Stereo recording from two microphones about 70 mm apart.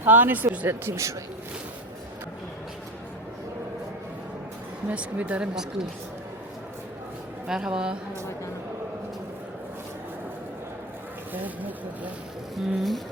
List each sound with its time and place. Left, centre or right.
0.0 s speech: right
4.9 s speech: right
7.4 s speech: centre
11.4 s speech: right
12.5 s speech: centre